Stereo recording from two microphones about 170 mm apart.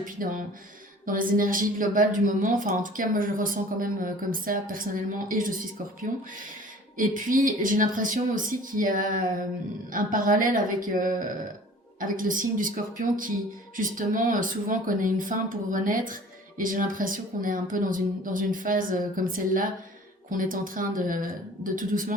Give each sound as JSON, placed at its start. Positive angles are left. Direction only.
{"t": 0.2, "sound": "a woman's voice", "side_deg": -55}